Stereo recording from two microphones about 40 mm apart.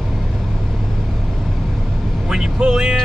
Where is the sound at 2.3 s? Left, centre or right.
Centre.